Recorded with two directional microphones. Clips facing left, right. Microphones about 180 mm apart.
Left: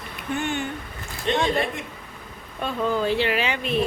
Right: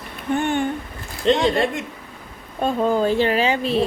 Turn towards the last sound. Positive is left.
turn(degrees=-30)  # may be behind; listen again after turning